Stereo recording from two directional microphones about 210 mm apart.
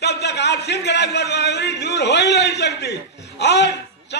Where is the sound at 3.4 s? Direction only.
55° left (ahead or behind).